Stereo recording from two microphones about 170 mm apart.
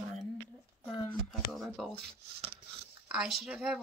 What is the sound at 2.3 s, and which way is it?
Wood, 75° right (ahead or behind).